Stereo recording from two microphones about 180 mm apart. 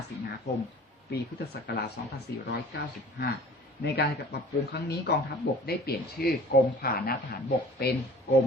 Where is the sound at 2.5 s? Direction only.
65° left (ahead or behind).